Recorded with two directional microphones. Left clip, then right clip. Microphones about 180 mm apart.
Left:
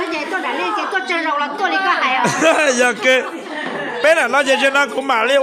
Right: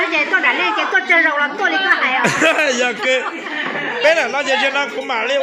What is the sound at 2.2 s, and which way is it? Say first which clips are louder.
Speech: even; 10° left (ahead or behind).